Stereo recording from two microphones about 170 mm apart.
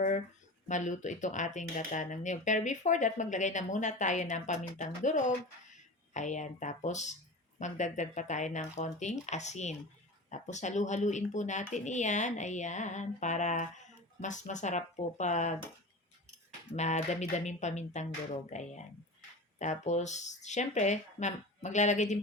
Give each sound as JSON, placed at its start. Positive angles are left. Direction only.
{"t": 0.7, "sound": "speech", "side_deg": 45}
{"t": 16.7, "sound": "speech", "side_deg": 40}